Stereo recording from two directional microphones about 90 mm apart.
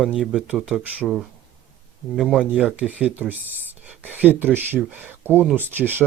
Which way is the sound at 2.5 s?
10° right (ahead or behind).